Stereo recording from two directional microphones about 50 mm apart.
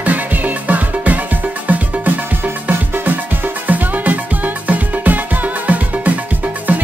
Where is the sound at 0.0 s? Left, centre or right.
Right.